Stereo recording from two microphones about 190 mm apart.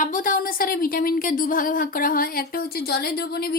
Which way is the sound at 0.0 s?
45° left (ahead or behind).